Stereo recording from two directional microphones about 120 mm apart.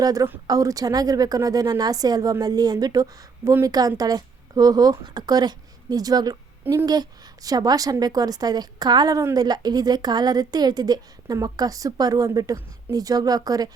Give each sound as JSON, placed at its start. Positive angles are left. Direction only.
{"t": 0.0, "sound": "a woman's voice", "side_deg": -30}